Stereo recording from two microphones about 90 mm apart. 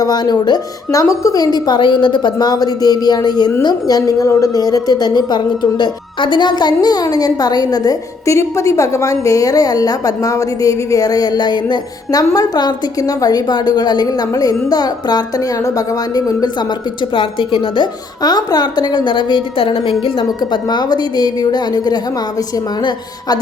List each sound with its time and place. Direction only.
0.0 s a woman's voice: 45° left (ahead or behind)
8.4 s a woman's voice: 35° left (ahead or behind)
17.2 s a woman's voice: 75° left (ahead or behind)
18.2 s a woman's voice: 50° left (ahead or behind); by 20.2 s 85° left
20.4 s a woman's voice: 50° left (ahead or behind)